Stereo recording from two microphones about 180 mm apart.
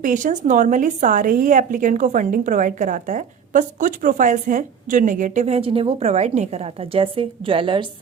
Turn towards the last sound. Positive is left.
turn(degrees=-30)  # may be behind; listen again after turning